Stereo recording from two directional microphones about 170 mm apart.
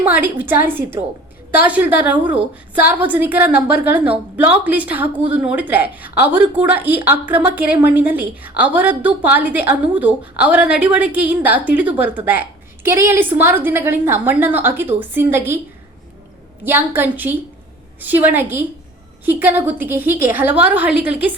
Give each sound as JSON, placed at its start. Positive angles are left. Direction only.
{"t": 0.0, "sound": "a woman's voice", "side_deg": -10}
{"t": 16.6, "sound": "a woman's voice", "side_deg": -10}